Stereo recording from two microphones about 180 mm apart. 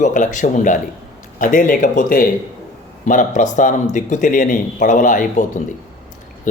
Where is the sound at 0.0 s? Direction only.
45° left (ahead or behind).